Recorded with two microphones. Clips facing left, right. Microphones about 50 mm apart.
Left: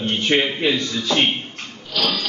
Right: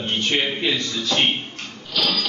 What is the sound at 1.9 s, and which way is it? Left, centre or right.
Speech, centre.